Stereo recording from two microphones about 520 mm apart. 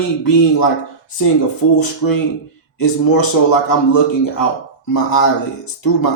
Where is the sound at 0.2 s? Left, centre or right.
Left.